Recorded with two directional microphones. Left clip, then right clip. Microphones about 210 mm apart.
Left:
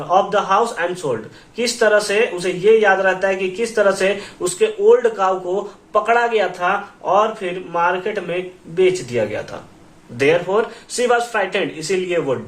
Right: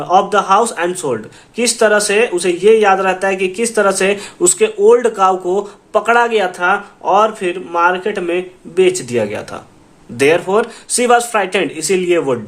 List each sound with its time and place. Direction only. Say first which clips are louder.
0.1 s speech: right 4 dB; 50° right (ahead or behind)